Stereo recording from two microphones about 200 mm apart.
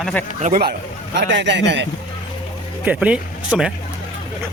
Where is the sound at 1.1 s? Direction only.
65° right (ahead or behind).